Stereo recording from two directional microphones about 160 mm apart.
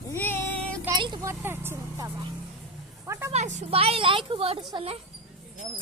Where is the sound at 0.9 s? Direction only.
30° right (ahead or behind).